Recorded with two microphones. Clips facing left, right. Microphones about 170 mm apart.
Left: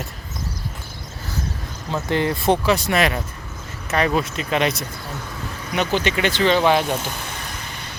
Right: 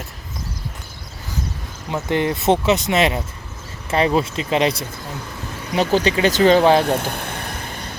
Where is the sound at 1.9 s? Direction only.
15° right (ahead or behind); by 6.8 s 35° right (ahead or behind).